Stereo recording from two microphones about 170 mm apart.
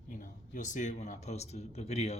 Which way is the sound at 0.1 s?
50° left (ahead or behind).